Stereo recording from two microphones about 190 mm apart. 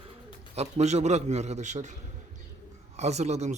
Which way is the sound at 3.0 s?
35° right (ahead or behind).